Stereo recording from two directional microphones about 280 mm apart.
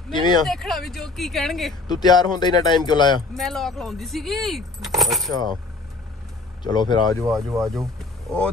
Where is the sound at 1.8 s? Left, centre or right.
Centre.